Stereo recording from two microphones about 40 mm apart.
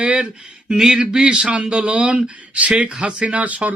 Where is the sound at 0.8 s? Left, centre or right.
Centre; by 3.7 s right.